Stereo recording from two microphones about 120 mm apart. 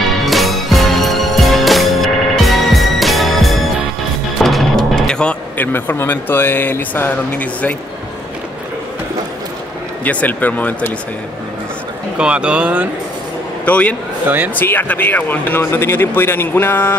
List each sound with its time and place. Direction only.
0.2 s music: centre (ahead or behind)
4.4 s speech: centre (ahead or behind)
10.0 s speech: 15° left (ahead or behind)
12.2 s speech: 10° right (ahead or behind)
13.7 s speech: 10° left (ahead or behind)